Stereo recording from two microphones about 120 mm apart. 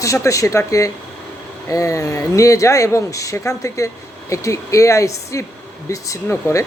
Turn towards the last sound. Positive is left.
turn(degrees=25)  # may be behind; listen again after turning